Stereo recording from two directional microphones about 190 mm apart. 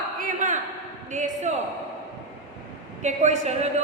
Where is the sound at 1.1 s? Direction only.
40° right (ahead or behind).